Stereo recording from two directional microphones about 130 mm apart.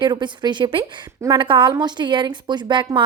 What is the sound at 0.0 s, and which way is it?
A woman's voice, 35° right (ahead or behind).